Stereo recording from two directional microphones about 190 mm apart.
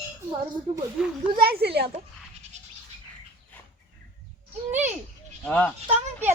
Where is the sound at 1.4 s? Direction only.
55° right (ahead or behind).